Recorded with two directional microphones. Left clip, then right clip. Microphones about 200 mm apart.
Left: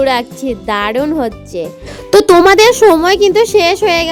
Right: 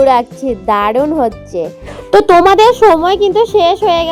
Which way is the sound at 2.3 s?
35° left (ahead or behind).